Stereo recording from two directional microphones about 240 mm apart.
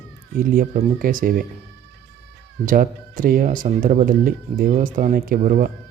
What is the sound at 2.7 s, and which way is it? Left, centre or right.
Speech, right.